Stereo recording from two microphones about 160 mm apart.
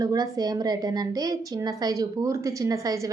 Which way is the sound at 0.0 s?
20° right (ahead or behind).